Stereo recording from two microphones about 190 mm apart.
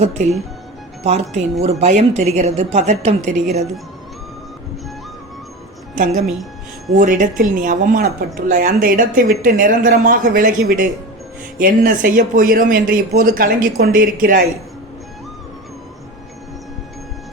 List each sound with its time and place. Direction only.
0.0 s a woman's voice: 35° right (ahead or behind)
5.9 s a woman's voice: 40° right (ahead or behind)